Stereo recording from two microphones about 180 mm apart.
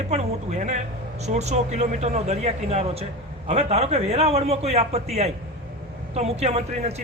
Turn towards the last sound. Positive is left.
turn(degrees=-40)  # may be behind; listen again after turning